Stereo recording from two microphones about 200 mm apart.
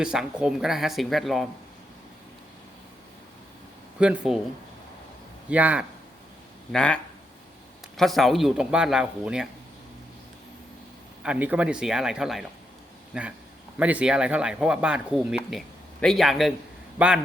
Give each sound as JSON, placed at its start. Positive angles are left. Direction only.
{"t": 0.0, "sound": "speech", "side_deg": -5}
{"t": 4.0, "sound": "speech", "side_deg": -5}
{"t": 5.5, "sound": "a man's voice", "side_deg": -5}
{"t": 6.7, "sound": "speech", "side_deg": 5}
{"t": 11.2, "sound": "speech", "side_deg": -5}